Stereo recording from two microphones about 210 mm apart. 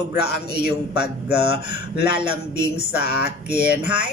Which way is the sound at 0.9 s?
50° left (ahead or behind).